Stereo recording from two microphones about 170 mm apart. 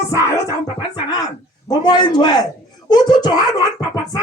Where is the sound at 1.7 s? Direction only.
25° left (ahead or behind).